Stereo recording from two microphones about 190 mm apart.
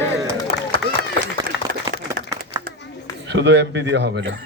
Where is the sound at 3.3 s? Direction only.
65° right (ahead or behind).